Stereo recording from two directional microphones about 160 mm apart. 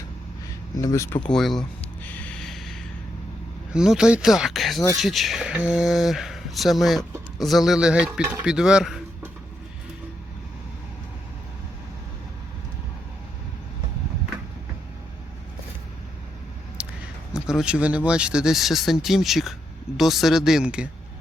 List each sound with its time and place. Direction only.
0.8 s speech: 20° left (ahead or behind)
1.2 s speech: centre (ahead or behind)
2.0 s a sound: 10° left (ahead or behind)
3.7 s speech: 5° right (ahead or behind)
16.8 s a sound: 10° right (ahead or behind)
17.3 s speech: 5° right (ahead or behind)